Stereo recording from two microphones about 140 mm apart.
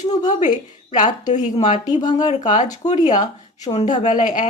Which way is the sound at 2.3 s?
60° left (ahead or behind).